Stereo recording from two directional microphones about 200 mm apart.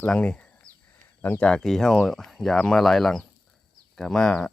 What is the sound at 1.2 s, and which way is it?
Speech, 10° left (ahead or behind).